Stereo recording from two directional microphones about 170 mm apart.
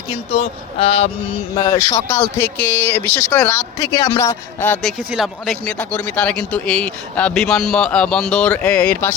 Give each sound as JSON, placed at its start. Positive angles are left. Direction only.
{"t": 0.3, "sound": "speech", "side_deg": 35}
{"t": 1.5, "sound": "speech", "side_deg": 20}